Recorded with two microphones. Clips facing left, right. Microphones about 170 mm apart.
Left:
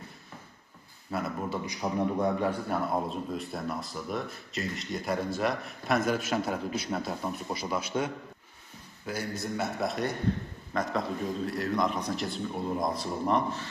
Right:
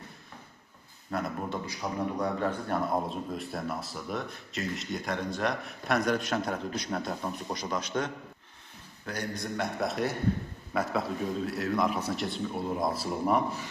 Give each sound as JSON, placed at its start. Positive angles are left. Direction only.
{"t": 1.1, "sound": "speech", "side_deg": 5}
{"t": 1.6, "sound": "a man's voice", "side_deg": 20}
{"t": 2.6, "sound": "a man's voice", "side_deg": 0}